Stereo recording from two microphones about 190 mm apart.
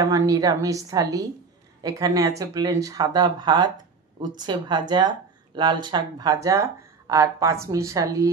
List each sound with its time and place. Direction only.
0.0 s speech: 20° right (ahead or behind)